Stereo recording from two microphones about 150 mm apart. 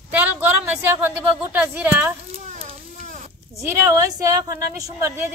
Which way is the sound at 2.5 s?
55° right (ahead or behind).